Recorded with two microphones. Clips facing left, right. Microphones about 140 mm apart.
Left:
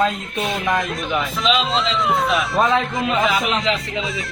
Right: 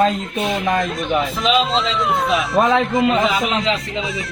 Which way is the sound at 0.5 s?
Centre (ahead or behind).